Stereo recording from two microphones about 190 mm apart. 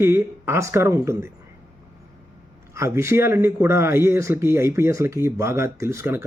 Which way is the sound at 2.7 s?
15° right (ahead or behind).